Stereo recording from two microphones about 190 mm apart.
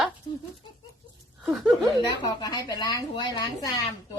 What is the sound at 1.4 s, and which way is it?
Chuckle, centre (ahead or behind).